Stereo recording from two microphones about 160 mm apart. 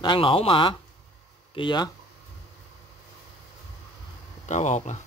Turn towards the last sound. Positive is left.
turn(degrees=50)  # may be behind; listen again after turning